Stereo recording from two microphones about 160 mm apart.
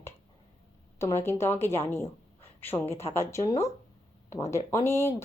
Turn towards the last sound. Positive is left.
turn(degrees=15)  # may be behind; listen again after turning